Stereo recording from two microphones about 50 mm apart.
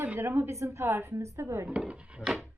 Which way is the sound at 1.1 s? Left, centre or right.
Right.